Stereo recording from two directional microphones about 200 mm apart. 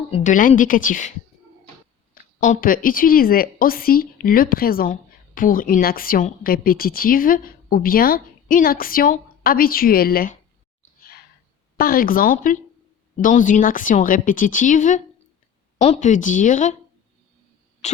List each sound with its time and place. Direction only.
0.1 s a woman's voice: 40° left (ahead or behind)
2.4 s speech: 40° left (ahead or behind)
11.8 s a woman's voice: 45° left (ahead or behind)
17.8 s a sound: 35° left (ahead or behind)